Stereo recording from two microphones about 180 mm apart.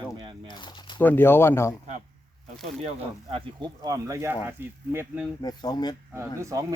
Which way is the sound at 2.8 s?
30° right (ahead or behind).